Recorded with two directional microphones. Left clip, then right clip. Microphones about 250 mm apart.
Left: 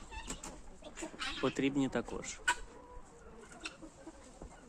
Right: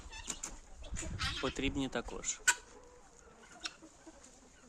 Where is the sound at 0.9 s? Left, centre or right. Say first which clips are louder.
Right 2 dB; right.